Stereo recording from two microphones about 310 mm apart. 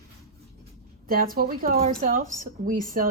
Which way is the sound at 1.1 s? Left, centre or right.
Right.